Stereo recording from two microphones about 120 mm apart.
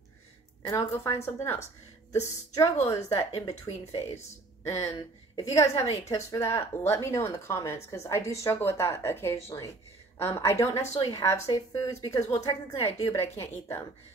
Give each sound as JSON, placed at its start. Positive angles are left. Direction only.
{"t": 0.6, "sound": "a woman's voice", "side_deg": 30}